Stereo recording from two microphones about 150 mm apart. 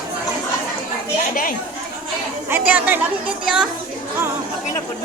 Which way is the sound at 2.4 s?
10° right (ahead or behind).